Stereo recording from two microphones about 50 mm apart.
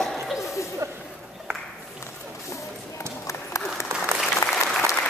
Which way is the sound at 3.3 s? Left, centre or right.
Left.